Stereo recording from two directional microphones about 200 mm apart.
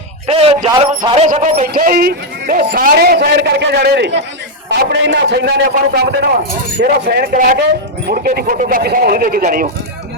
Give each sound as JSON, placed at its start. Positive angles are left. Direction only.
{"t": 0.3, "sound": "a sound", "side_deg": -30}
{"t": 1.3, "sound": "speech", "side_deg": -35}
{"t": 1.7, "sound": "a man's voice", "side_deg": -45}